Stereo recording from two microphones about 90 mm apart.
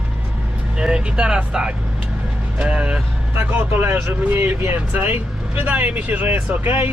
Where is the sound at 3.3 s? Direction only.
25° right (ahead or behind).